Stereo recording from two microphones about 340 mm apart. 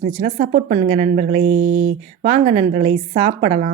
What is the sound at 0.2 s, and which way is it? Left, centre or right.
A woman's voice, right.